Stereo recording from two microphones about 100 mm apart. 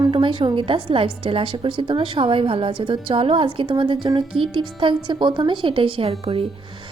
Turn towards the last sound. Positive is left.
turn(degrees=-80)